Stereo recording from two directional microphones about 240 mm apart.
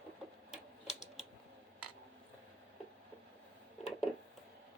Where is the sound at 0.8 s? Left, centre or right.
Left.